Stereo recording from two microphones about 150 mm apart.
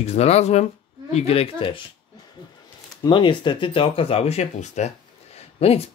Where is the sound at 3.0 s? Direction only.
30° left (ahead or behind).